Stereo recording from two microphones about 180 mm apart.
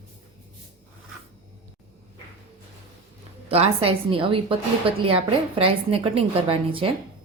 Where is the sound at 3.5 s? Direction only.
30° right (ahead or behind).